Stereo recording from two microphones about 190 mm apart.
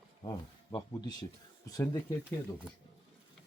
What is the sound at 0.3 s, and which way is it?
Speech, 20° left (ahead or behind).